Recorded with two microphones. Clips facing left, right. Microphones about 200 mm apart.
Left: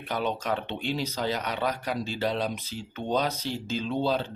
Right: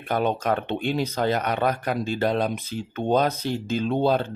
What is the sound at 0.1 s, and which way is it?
Speech, 50° right (ahead or behind).